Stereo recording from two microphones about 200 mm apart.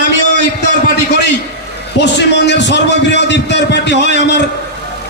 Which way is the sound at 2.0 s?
60° left (ahead or behind).